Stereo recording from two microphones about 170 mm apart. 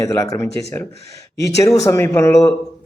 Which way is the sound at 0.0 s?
20° left (ahead or behind).